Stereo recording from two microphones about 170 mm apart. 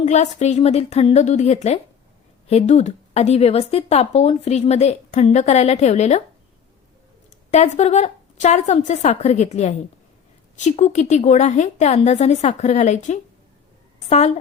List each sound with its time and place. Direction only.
0.0 s speech: 45° left (ahead or behind)
7.5 s a woman's voice: 40° left (ahead or behind)